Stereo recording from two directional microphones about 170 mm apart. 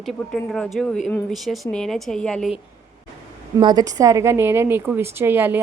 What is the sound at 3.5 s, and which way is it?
A woman's voice, 20° right (ahead or behind).